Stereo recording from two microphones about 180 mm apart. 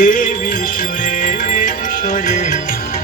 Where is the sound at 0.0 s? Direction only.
50° left (ahead or behind).